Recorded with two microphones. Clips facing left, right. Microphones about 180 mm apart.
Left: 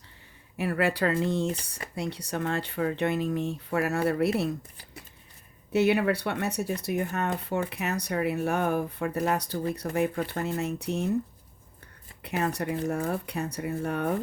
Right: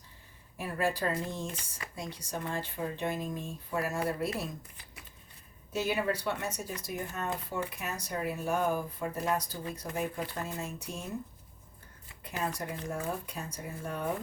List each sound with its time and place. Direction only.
0.5 s speech: 70° left (ahead or behind)
5.7 s speech: 70° left (ahead or behind)
12.2 s speech: 70° left (ahead or behind)